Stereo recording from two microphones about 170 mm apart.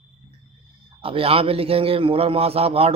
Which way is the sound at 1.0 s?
35° right (ahead or behind).